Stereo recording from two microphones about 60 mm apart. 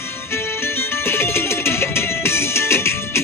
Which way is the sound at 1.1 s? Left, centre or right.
Left.